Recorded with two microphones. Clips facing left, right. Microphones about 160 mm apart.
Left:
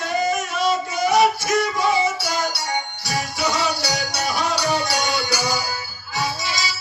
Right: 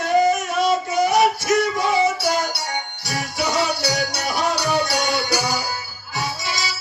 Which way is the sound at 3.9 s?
60° right (ahead or behind).